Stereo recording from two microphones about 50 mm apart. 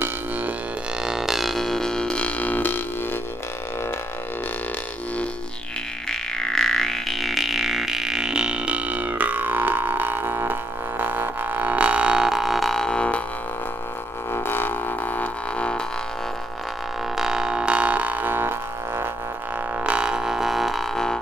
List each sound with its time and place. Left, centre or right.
0.0 s a sound: right
1.0 s a sound: centre; by 3.2 s left
6.0 s didgeridoo: centre; by 12.3 s right
12.3 s didgeridoo: centre
14.3 s didgeridoo: left
15.5 s music: left
17.2 s music: centre; by 19.0 s right
19.8 s didgeridoo: centre
20.9 s music: centre